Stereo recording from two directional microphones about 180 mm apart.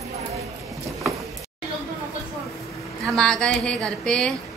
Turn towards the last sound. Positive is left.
turn(degrees=5)  # may be behind; listen again after turning